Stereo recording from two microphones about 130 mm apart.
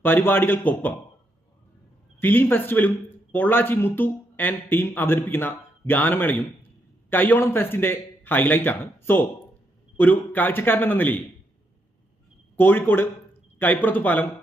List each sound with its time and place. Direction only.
0.0 s speech: 15° left (ahead or behind)
2.2 s speech: 15° left (ahead or behind)
12.5 s speech: 15° left (ahead or behind)